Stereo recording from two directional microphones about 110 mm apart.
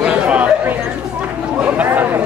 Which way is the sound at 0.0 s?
15° right (ahead or behind).